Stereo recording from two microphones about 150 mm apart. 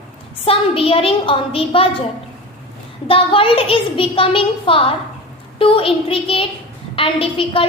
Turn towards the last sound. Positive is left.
turn(degrees=40)  # may be behind; listen again after turning